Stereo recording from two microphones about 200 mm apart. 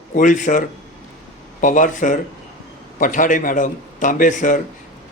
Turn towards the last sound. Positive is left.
turn(degrees=40)  # may be behind; listen again after turning